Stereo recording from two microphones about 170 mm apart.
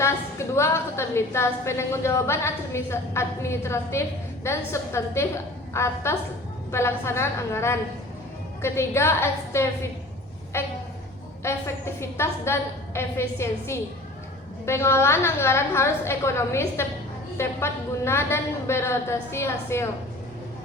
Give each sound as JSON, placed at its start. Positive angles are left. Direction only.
{"t": 0.0, "sound": "a woman's voice", "side_deg": 15}